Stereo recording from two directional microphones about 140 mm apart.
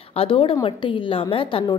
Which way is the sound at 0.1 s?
40° left (ahead or behind).